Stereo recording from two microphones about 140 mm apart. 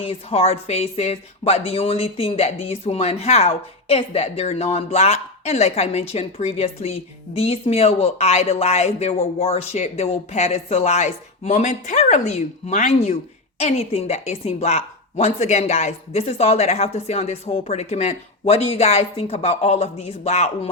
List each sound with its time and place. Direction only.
0.0 s speech: 45° left (ahead or behind)